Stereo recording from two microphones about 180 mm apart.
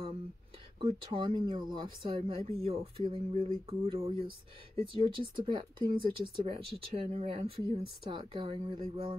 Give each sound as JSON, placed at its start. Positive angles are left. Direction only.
{"t": 0.7, "sound": "speech", "side_deg": -30}